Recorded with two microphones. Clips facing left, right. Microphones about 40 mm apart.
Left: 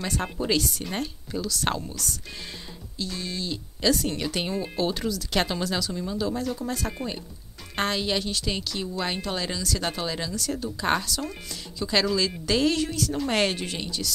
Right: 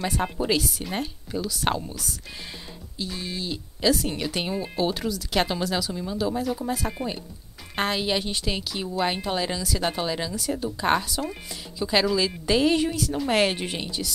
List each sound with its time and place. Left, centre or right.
0.0 s speech: centre
13.6 s speech: centre